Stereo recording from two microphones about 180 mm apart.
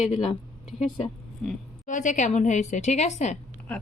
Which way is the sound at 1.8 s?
45° left (ahead or behind).